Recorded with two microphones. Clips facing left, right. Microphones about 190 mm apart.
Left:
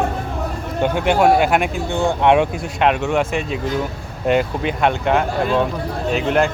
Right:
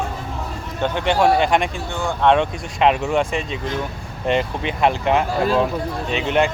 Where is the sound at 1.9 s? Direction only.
20° left (ahead or behind).